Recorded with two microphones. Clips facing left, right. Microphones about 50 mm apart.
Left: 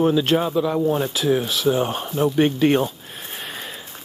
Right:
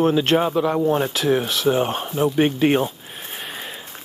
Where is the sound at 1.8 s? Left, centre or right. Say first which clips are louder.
Even; right.